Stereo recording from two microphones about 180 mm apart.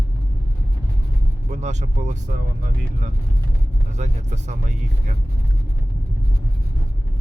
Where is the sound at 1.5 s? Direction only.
40° right (ahead or behind).